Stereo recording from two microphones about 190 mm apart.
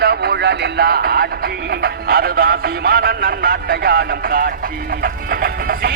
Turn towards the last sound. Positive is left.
turn(degrees=-50)  # may be behind; listen again after turning